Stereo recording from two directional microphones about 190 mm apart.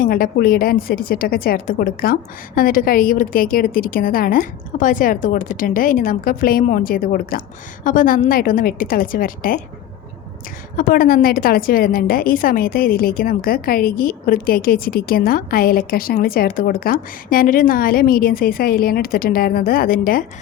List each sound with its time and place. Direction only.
0.0 s a woman's voice: 50° left (ahead or behind)
10.8 s a woman's voice: 45° left (ahead or behind)